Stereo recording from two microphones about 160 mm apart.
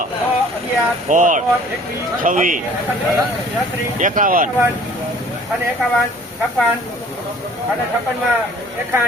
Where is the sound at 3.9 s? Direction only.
55° right (ahead or behind).